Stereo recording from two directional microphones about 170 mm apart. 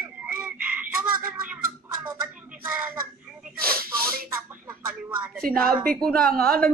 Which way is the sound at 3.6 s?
60° right (ahead or behind).